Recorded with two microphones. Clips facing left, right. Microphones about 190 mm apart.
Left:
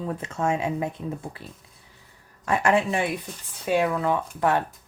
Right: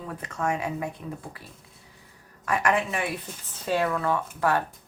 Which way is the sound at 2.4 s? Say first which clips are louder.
Left 3 dB; 25° left (ahead or behind).